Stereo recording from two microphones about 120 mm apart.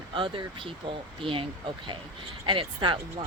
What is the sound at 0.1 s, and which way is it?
Speech, 45° right (ahead or behind).